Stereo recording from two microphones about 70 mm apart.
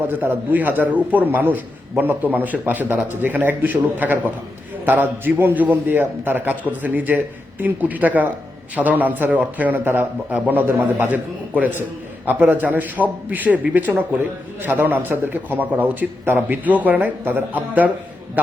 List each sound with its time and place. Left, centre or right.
0.1 s a man's voice: right